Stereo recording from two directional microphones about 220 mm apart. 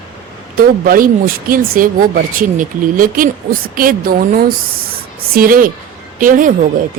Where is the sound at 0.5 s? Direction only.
40° right (ahead or behind).